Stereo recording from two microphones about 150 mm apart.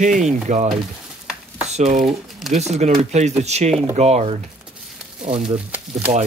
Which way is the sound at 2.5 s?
45° right (ahead or behind).